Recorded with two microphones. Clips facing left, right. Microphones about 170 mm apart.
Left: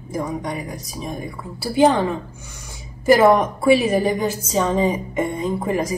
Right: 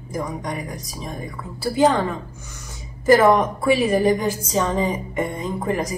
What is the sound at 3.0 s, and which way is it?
A woman's voice, 10° left (ahead or behind).